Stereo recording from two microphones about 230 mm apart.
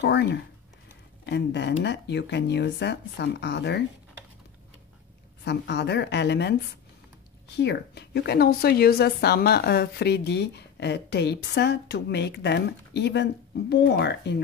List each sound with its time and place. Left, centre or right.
0.0 s a woman's voice: left
5.4 s a woman's voice: left
7.5 s a woman's voice: left